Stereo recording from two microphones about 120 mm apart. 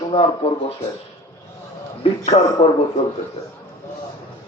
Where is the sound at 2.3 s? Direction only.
65° left (ahead or behind).